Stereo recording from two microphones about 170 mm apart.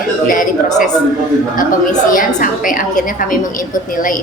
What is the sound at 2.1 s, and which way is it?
Speech, 50° left (ahead or behind).